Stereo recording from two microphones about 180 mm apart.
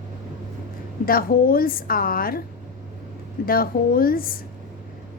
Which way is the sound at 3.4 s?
55° left (ahead or behind).